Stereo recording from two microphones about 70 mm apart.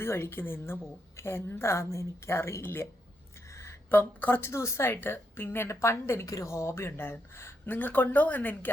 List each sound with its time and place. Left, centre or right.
0.0 s a woman's voice: left
3.8 s a woman's voice: left
7.7 s a woman's voice: left